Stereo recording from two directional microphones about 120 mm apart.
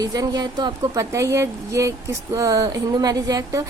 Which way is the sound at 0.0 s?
35° right (ahead or behind).